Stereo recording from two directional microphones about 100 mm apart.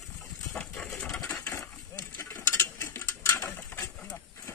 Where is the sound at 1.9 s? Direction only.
25° left (ahead or behind).